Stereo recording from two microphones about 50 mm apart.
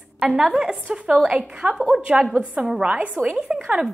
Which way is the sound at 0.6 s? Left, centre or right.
Centre.